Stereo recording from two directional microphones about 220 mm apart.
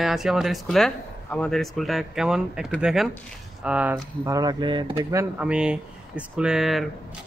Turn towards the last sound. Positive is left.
turn(degrees=0)  # may be behind; listen again after turning